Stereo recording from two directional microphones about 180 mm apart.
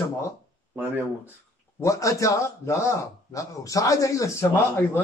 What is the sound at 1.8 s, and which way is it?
A man's voice, 15° left (ahead or behind).